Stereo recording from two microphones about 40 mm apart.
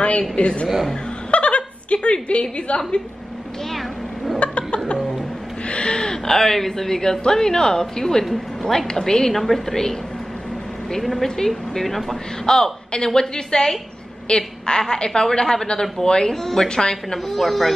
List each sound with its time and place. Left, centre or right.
0.4 s a woman's voice: left
1.3 s chuckle: left
2.4 s a woman's voice: left
4.4 s a sound: left
5.7 s a woman's voice: left; by 12.2 s centre
12.4 s a woman's voice: centre